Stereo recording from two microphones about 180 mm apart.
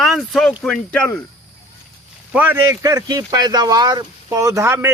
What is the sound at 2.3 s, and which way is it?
Speech, 10° right (ahead or behind).